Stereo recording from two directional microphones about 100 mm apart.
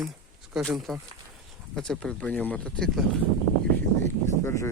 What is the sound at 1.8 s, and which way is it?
Speech, 10° left (ahead or behind).